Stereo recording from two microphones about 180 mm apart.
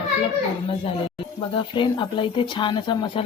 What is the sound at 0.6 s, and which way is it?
Speech, 30° left (ahead or behind).